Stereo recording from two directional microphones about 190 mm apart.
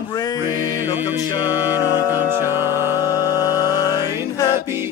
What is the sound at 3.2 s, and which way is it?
Music, 20° left (ahead or behind).